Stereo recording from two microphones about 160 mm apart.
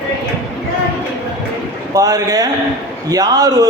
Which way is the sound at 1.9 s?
20° right (ahead or behind).